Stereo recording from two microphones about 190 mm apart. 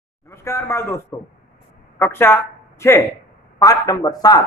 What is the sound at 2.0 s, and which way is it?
A man's voice, 10° left (ahead or behind).